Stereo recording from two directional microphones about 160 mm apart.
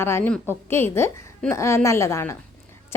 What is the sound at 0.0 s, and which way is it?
A woman's voice, 15° left (ahead or behind).